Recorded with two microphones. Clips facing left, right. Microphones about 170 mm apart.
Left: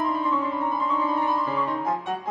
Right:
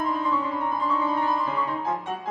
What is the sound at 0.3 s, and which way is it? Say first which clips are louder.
Music: left 1 dB; centre (ahead or behind).